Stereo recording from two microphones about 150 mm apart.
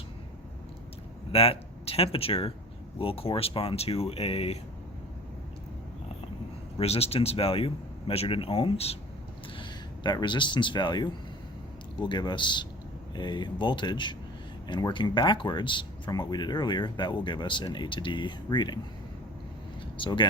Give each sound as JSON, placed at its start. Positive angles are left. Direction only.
{"t": 1.3, "sound": "speech", "side_deg": 40}
{"t": 6.7, "sound": "speech", "side_deg": 45}
{"t": 9.6, "sound": "speech", "side_deg": 30}
{"t": 20.0, "sound": "speech", "side_deg": 35}